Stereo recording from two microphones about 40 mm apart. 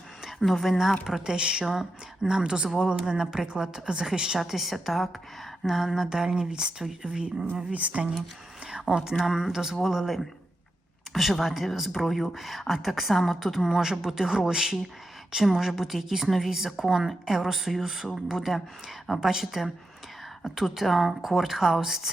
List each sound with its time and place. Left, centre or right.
0.3 s speech: centre
1.2 s speech: right
1.6 s a woman's voice: centre
2.2 s a woman's voice: centre
4.4 s a woman's voice: centre
6.8 s speech: centre
7.7 s speech: right
8.9 s a woman's voice: centre
13.7 s a woman's voice: centre
20.7 s a woman's voice: centre